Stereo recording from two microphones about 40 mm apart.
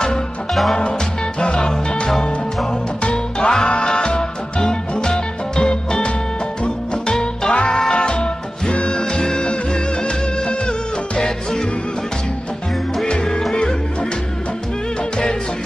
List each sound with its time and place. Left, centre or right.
1.4 s music: left
11.1 s music: centre
13.1 s music: left